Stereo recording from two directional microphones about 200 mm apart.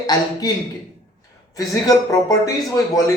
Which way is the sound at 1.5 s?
15° left (ahead or behind).